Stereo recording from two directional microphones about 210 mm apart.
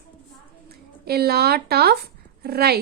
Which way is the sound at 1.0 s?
50° right (ahead or behind).